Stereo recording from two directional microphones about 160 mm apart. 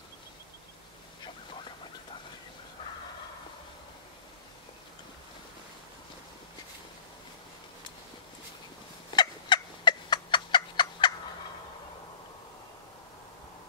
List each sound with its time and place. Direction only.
9.1 s turkey: 30° left (ahead or behind)